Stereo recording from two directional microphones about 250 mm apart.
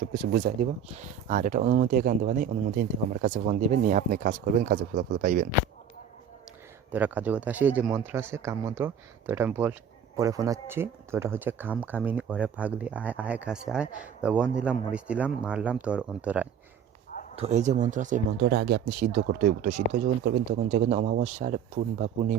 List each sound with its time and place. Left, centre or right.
0.1 s speech: right
6.9 s speech: centre
17.3 s speech: right